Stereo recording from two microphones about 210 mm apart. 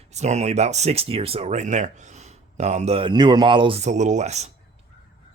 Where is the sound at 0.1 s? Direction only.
35° right (ahead or behind).